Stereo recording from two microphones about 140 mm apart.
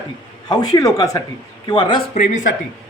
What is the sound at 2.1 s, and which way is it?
Speech, 60° left (ahead or behind).